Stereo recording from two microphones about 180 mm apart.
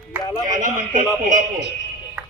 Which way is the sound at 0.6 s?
45° right (ahead or behind).